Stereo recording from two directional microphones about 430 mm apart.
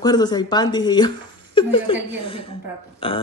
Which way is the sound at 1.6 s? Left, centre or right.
Centre.